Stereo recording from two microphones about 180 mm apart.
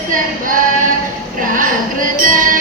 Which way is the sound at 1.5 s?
50° right (ahead or behind).